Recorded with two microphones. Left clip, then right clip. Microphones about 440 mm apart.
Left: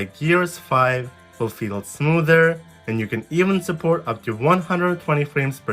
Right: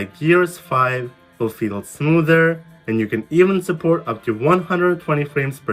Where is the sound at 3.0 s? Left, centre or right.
Centre.